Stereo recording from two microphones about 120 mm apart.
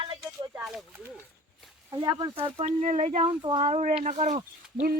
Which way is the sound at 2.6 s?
70° right (ahead or behind).